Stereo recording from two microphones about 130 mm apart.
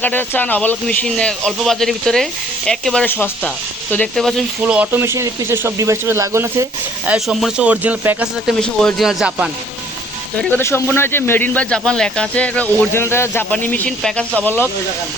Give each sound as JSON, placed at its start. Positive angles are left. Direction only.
{"t": 0.0, "sound": "a man's voice", "side_deg": 15}
{"t": 4.6, "sound": "speech", "side_deg": -10}
{"t": 7.1, "sound": "speech", "side_deg": -5}
{"t": 8.6, "sound": "a man's voice", "side_deg": 5}
{"t": 10.6, "sound": "speech", "side_deg": 20}